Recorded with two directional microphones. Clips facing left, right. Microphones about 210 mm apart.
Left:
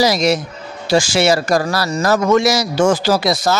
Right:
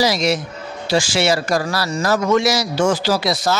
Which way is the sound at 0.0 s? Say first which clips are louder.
Left 3 dB; 40° left (ahead or behind).